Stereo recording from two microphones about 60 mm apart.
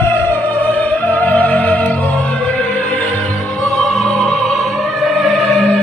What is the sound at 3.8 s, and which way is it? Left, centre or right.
Opera, centre.